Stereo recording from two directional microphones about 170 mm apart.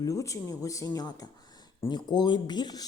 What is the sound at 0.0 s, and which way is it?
Speech, 20° left (ahead or behind).